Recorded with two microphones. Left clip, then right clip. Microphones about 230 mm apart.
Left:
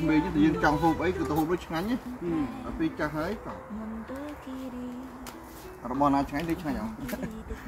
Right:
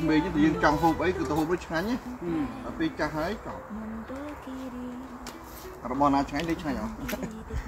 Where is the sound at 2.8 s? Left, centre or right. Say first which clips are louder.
Right 1 dB; centre.